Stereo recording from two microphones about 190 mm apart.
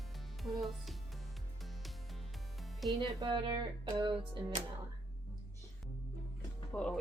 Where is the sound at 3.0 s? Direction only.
25° right (ahead or behind).